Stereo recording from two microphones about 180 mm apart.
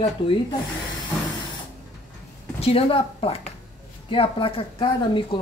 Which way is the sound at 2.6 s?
30° left (ahead or behind).